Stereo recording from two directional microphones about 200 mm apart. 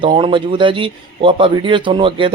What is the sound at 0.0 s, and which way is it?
A man's voice, 25° right (ahead or behind).